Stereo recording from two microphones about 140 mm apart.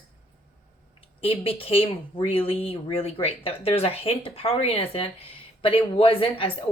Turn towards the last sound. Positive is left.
turn(degrees=40)  # may be behind; listen again after turning